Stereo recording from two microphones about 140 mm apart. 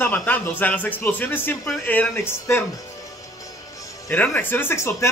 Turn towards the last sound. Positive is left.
turn(degrees=20)  # may be behind; listen again after turning